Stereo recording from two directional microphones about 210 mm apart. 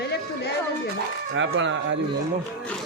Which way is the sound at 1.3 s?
65° right (ahead or behind).